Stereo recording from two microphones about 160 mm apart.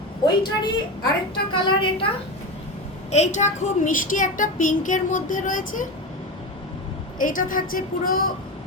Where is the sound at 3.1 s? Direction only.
45° left (ahead or behind).